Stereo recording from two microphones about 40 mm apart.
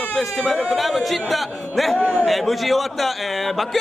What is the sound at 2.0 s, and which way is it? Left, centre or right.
Speech, right.